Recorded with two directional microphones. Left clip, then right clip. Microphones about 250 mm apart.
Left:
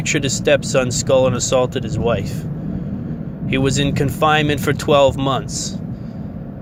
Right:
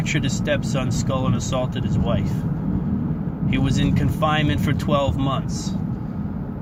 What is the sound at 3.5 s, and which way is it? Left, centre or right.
Speech, left.